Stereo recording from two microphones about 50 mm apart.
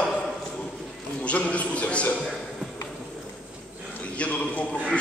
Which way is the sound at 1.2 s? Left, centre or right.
Left.